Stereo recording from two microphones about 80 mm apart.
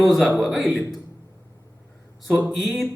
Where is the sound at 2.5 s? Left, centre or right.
Centre.